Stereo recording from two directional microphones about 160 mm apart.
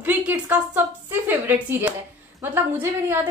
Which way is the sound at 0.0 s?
10° right (ahead or behind).